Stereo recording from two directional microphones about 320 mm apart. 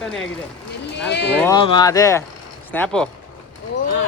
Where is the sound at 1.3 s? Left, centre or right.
Centre.